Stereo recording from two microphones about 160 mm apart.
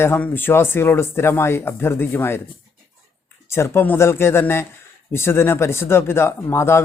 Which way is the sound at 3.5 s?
15° left (ahead or behind).